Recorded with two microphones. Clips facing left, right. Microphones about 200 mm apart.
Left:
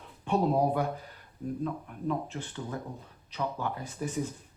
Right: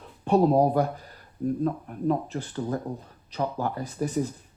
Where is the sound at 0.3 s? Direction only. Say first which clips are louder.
Right 6 dB; 40° right (ahead or behind).